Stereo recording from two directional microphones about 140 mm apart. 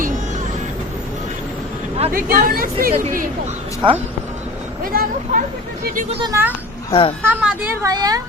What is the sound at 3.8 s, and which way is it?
Speech, 35° right (ahead or behind).